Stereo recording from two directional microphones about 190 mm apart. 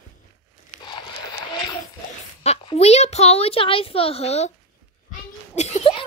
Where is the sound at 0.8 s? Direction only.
20° left (ahead or behind).